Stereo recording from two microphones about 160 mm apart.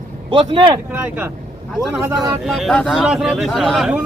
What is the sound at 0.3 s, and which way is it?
Speech, 30° right (ahead or behind).